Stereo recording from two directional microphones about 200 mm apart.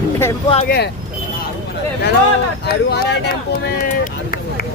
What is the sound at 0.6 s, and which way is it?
Speech, 50° left (ahead or behind).